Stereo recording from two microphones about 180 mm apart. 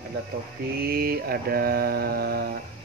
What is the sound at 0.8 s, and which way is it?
Mantra, 55° right (ahead or behind).